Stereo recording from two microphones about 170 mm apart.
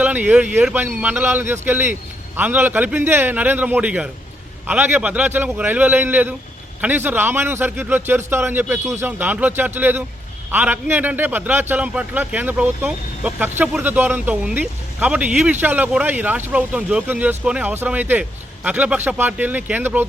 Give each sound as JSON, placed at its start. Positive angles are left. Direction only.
{"t": 0.0, "sound": "a man's voice", "side_deg": -10}